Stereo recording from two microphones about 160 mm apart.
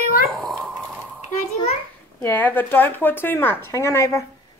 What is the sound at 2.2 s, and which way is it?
Speech, 10° left (ahead or behind).